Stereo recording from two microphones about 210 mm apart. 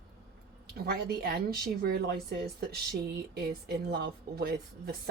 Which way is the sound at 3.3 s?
50° right (ahead or behind).